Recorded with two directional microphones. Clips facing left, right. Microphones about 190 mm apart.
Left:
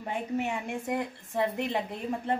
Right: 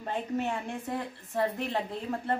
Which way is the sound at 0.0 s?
10° left (ahead or behind).